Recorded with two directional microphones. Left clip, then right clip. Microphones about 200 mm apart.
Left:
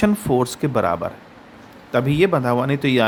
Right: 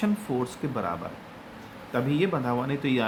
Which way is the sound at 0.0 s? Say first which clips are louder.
Left 10 dB; 55° left (ahead or behind).